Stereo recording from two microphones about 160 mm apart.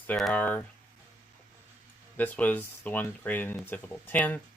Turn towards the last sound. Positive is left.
turn(degrees=10)  # may be behind; listen again after turning